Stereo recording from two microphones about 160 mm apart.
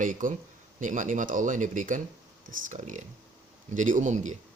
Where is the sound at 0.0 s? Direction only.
55° right (ahead or behind).